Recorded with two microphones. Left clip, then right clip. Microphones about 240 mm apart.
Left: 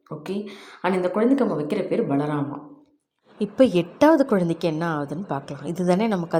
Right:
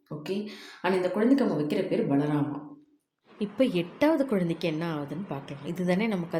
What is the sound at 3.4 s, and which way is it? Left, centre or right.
A woman's voice, left.